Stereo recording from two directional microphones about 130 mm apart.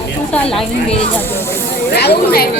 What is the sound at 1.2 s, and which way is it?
Speech, 15° left (ahead or behind).